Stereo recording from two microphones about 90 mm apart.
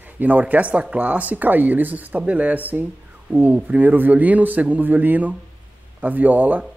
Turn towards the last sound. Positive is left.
turn(degrees=-20)  # may be behind; listen again after turning